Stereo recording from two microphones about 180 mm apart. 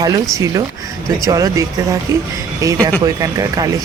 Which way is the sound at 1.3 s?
20° right (ahead or behind).